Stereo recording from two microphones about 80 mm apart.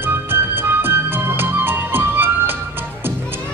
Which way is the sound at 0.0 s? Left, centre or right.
Right.